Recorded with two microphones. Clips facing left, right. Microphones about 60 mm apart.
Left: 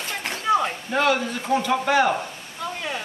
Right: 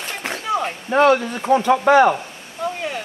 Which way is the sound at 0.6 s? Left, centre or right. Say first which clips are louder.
Right 6 dB; right.